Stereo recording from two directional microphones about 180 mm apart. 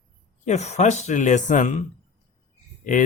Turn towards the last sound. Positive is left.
turn(degrees=45)  # may be behind; listen again after turning